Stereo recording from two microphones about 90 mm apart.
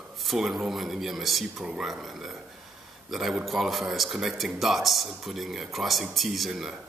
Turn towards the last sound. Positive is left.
turn(degrees=0)  # may be behind; listen again after turning